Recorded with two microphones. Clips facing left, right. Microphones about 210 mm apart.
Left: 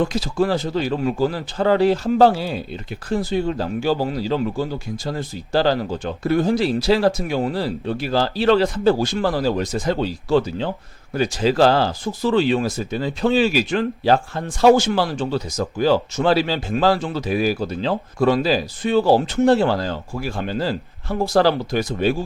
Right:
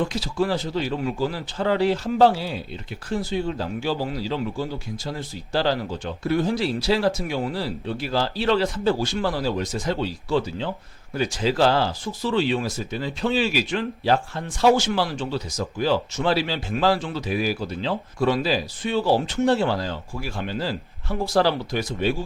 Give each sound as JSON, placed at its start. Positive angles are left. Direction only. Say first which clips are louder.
{"t": 0.1, "sound": "speech", "louder": "left 4 dB", "side_deg": 45}